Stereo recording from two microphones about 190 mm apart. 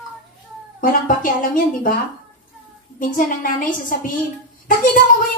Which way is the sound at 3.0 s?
45° left (ahead or behind).